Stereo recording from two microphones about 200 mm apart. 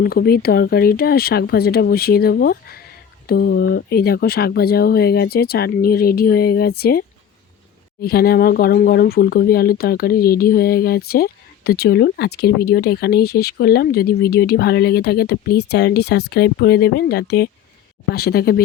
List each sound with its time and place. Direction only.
0.0 s speech: 50° left (ahead or behind)
8.0 s speech: 50° left (ahead or behind)